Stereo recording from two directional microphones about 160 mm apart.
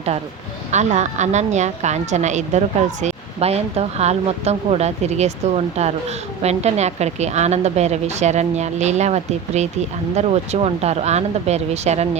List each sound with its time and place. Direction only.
0.7 s a woman's voice: 45° right (ahead or behind)